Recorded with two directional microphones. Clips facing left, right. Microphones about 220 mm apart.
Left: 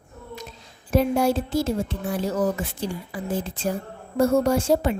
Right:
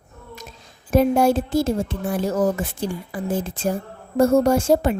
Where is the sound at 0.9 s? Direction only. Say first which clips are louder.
Right 4 dB; 50° right (ahead or behind).